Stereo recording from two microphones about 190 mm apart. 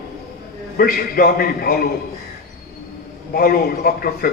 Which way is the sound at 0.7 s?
50° left (ahead or behind).